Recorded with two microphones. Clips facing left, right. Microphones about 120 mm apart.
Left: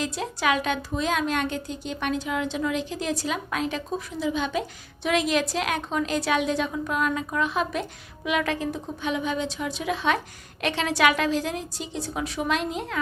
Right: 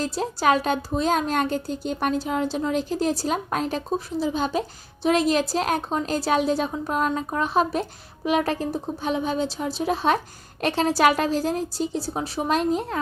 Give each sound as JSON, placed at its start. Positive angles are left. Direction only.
{"t": 0.0, "sound": "a woman's voice", "side_deg": -35}